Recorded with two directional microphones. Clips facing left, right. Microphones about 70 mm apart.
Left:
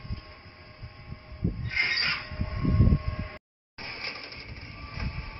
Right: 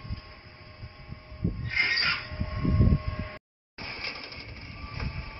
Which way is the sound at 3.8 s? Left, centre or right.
Left.